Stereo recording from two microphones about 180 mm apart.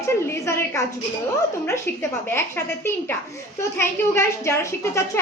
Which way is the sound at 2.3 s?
15° left (ahead or behind).